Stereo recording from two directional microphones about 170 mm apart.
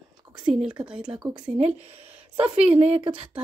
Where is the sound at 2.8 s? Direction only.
35° right (ahead or behind).